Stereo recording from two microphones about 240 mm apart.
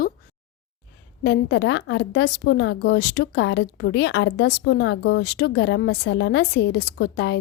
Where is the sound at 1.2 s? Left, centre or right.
Left.